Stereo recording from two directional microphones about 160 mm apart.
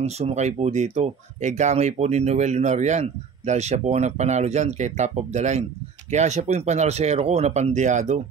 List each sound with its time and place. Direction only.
0.0 s speech: 45° right (ahead or behind)